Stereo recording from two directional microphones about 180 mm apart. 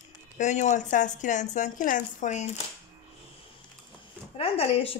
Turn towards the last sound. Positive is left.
turn(degrees=35)  # may be behind; listen again after turning